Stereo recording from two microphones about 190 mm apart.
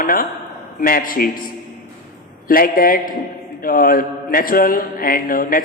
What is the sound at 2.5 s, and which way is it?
A man's voice, 50° left (ahead or behind).